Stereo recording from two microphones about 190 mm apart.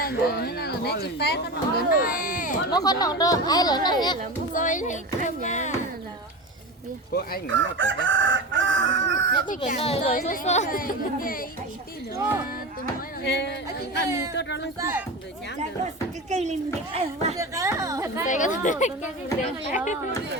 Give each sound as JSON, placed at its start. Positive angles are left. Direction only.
{"t": 0.0, "sound": "speech", "side_deg": 55}
{"t": 2.6, "sound": "speech", "side_deg": 20}
{"t": 4.5, "sound": "speech", "side_deg": 40}
{"t": 7.1, "sound": "speech", "side_deg": 55}
{"t": 7.8, "sound": "chicken", "side_deg": -80}
{"t": 9.6, "sound": "speech", "side_deg": 30}
{"t": 10.2, "sound": "speech", "side_deg": 45}
{"t": 13.2, "sound": "speech", "side_deg": 65}
{"t": 13.7, "sound": "a woman's voice", "side_deg": -15}
{"t": 14.3, "sound": "speech", "side_deg": 65}
{"t": 14.8, "sound": "a woman's voice", "side_deg": -15}
{"t": 16.3, "sound": "a child's voice", "side_deg": -35}
{"t": 17.3, "sound": "a woman's voice", "side_deg": -15}
{"t": 18.3, "sound": "speech", "side_deg": 40}